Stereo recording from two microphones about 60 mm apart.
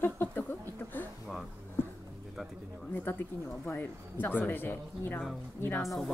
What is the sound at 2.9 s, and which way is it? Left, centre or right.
Speech, left.